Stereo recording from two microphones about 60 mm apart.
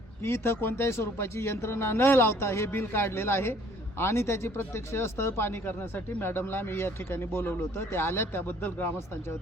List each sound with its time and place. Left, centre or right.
0.3 s a man's voice: left